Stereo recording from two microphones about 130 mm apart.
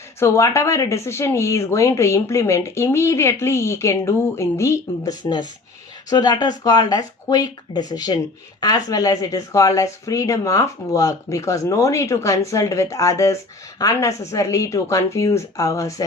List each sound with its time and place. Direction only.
0.2 s speech: 20° left (ahead or behind)
5.2 s speech: 35° left (ahead or behind)